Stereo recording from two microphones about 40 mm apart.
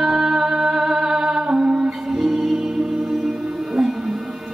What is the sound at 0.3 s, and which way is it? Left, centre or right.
Music, centre.